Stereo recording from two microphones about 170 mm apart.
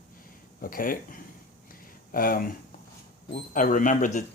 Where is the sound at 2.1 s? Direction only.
55° left (ahead or behind).